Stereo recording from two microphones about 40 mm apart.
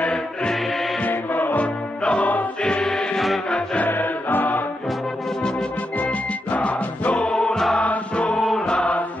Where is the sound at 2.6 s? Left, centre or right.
Left.